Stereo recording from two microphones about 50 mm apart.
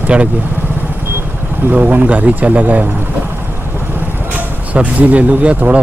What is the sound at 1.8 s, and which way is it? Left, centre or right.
Speech, right.